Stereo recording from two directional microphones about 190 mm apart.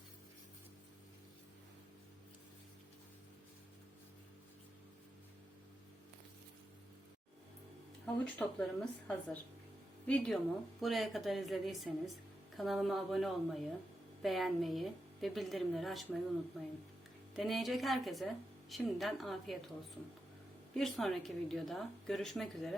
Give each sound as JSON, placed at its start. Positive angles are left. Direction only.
{"t": 8.0, "sound": "a woman's voice", "side_deg": 5}
{"t": 20.7, "sound": "a woman's voice", "side_deg": 0}